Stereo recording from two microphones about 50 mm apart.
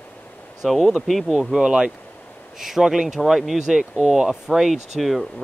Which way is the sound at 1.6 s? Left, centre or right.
Centre.